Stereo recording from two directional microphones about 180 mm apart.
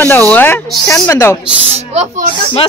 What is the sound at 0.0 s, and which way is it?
Speech, 10° left (ahead or behind).